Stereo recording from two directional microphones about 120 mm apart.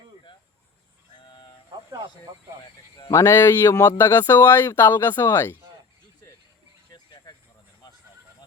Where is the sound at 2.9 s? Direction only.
35° left (ahead or behind).